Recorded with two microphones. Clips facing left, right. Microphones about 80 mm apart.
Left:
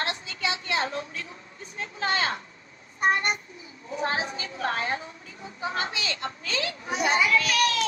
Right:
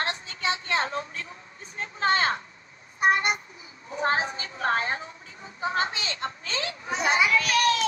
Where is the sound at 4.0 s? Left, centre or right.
Right.